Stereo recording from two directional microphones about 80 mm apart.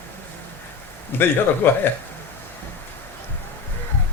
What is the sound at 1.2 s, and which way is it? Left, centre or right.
Speech, left.